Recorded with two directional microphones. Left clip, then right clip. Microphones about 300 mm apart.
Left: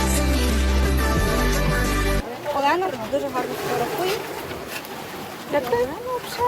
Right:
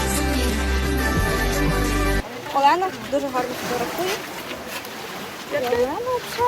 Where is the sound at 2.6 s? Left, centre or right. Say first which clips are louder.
Right 4 dB; centre.